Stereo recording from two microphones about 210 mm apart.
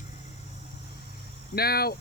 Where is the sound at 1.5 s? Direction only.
45° left (ahead or behind).